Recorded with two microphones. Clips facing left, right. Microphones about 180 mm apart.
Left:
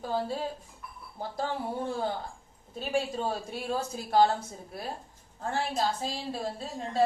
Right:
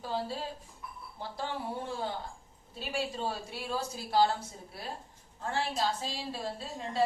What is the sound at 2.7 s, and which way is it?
A woman's voice, 45° left (ahead or behind).